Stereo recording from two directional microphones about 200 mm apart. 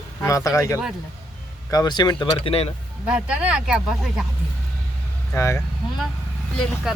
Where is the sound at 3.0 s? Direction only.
5° right (ahead or behind).